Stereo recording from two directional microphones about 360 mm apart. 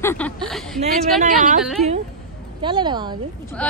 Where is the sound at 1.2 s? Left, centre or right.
Right.